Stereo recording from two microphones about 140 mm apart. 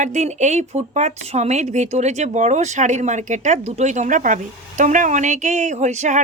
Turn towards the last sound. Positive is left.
turn(degrees=-60)  # may be behind; listen again after turning